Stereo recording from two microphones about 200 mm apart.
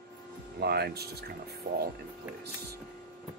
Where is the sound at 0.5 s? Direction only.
55° right (ahead or behind).